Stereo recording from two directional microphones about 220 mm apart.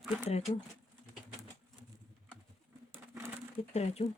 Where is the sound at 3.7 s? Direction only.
30° left (ahead or behind).